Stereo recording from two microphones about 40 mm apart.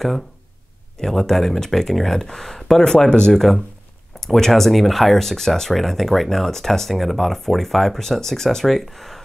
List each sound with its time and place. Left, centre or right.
0.9 s speech: centre